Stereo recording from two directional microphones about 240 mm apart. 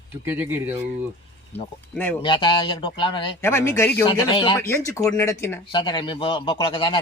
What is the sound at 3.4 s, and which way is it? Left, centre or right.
A man's voice, centre.